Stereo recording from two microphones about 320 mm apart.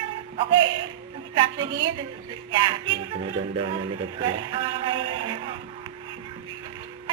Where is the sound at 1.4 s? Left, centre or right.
Centre.